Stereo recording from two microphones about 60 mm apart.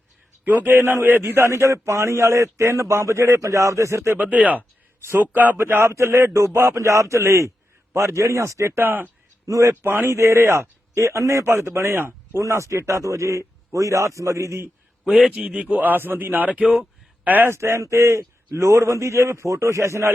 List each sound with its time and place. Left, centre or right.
0.4 s speech: right
1.2 s a man's voice: right
4.2 s a man's voice: right
4.9 s speech: right
5.3 s a man's voice: right
5.5 s speech: right
5.9 s a man's voice: right
8.8 s speech: right
9.5 s a man's voice: right
9.8 s speech: right
10.1 s a man's voice: right
12.4 s a man's voice: right
15.2 s a man's voice: centre; by 17.6 s right
17.6 s a man's voice: right